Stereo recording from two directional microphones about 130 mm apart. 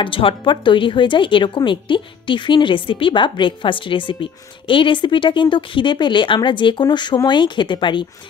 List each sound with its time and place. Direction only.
0.0 s speech: 40° left (ahead or behind)